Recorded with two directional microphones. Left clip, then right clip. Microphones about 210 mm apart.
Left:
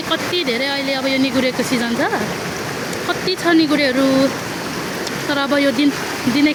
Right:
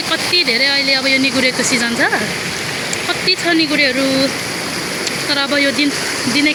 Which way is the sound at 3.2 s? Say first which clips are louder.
Right 1 dB; 15° left (ahead or behind).